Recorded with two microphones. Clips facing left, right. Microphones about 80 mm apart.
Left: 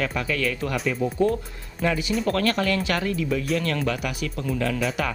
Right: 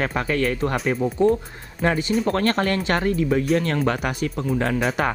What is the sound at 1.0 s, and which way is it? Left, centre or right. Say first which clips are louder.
Speech: right 2 dB; right.